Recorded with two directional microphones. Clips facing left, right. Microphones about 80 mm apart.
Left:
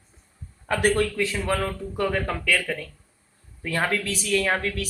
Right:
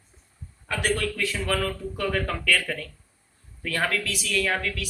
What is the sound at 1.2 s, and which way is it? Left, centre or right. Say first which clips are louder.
A man's voice: left 2 dB; left.